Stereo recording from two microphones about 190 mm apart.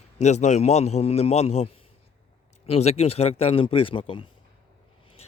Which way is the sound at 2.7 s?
35° left (ahead or behind).